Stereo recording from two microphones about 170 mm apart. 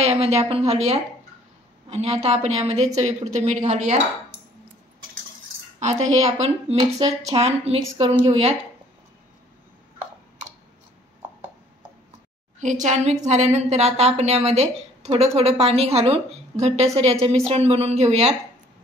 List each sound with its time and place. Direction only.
0.0 s a woman's voice: 40° right (ahead or behind)
5.8 s a woman's voice: 45° right (ahead or behind)
6.8 s speech: 20° right (ahead or behind)
7.3 s a woman's voice: 40° right (ahead or behind)
12.5 s a woman's voice: 45° right (ahead or behind)